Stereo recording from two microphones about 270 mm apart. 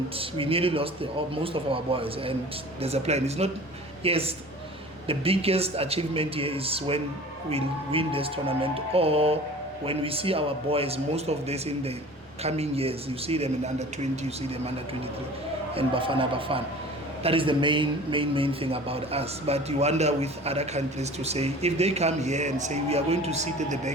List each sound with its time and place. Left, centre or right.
0.2 s a man's voice: centre
15.7 s a man's voice: centre